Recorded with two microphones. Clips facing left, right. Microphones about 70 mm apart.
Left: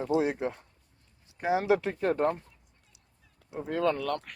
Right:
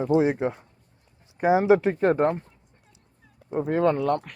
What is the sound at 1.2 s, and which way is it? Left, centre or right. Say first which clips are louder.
Speech: right 7 dB; right.